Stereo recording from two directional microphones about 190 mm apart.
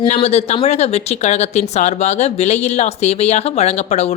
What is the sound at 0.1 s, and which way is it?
Speech, 35° left (ahead or behind).